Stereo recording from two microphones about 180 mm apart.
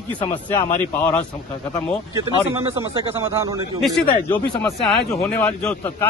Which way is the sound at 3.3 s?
15° right (ahead or behind).